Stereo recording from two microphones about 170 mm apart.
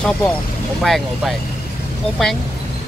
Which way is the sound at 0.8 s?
Centre (ahead or behind).